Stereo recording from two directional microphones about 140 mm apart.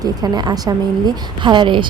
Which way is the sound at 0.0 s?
30° right (ahead or behind).